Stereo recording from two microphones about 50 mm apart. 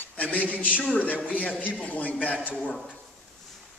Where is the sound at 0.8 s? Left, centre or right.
Left.